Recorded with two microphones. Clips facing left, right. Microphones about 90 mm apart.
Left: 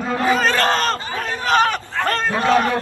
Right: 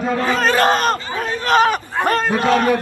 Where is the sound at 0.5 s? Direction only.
15° right (ahead or behind).